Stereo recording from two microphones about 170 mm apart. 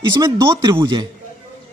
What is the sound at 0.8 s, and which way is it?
Speech, 25° right (ahead or behind).